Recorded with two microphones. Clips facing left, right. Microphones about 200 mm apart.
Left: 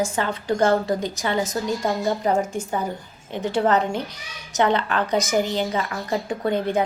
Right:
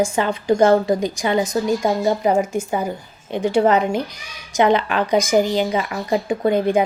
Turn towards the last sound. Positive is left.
turn(degrees=-10)  # may be behind; listen again after turning